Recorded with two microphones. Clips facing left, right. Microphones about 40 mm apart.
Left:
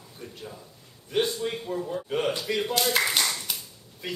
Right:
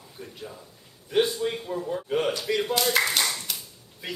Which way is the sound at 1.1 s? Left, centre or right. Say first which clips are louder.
Right 3 dB; centre.